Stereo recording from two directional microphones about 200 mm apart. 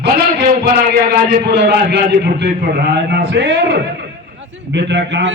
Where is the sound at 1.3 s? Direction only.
55° right (ahead or behind).